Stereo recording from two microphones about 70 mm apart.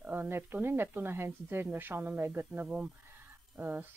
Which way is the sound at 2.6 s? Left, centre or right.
Right.